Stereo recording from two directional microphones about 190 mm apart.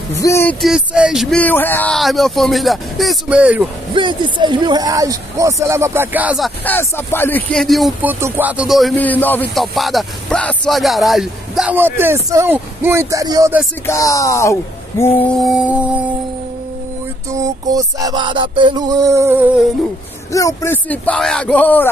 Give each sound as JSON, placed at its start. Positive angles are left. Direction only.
{"t": 0.1, "sound": "speech", "side_deg": 15}
{"t": 0.6, "sound": "speech", "side_deg": -5}
{"t": 3.9, "sound": "speech", "side_deg": -25}
{"t": 6.6, "sound": "speech", "side_deg": 10}
{"t": 13.8, "sound": "speech", "side_deg": 15}
{"t": 15.3, "sound": "speech", "side_deg": 0}
{"t": 17.3, "sound": "a sound", "side_deg": -20}
{"t": 20.3, "sound": "speech", "side_deg": 15}